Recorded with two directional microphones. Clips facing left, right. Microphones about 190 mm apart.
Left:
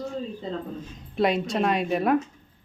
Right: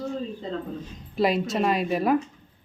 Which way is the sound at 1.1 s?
Centre (ahead or behind).